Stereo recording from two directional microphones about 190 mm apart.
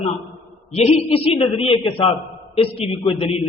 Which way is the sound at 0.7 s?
35° left (ahead or behind).